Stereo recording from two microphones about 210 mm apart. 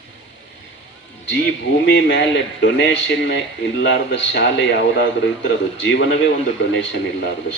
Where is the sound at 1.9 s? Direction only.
55° left (ahead or behind).